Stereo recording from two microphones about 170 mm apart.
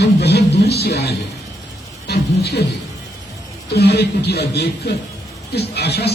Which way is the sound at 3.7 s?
75° left (ahead or behind).